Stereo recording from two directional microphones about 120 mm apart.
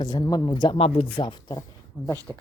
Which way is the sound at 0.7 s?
55° left (ahead or behind).